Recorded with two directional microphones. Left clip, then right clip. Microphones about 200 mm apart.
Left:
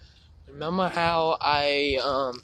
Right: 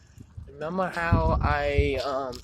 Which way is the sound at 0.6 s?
25° left (ahead or behind).